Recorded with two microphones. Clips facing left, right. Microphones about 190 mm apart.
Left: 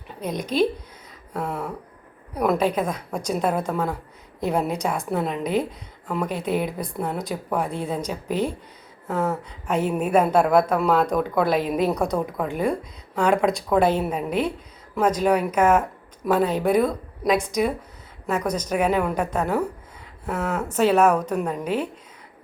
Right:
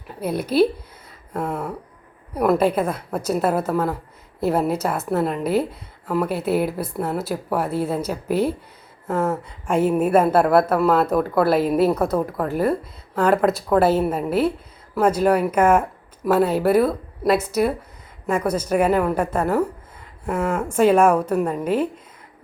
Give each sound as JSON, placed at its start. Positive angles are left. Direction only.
{"t": 0.1, "sound": "a woman's voice", "side_deg": -5}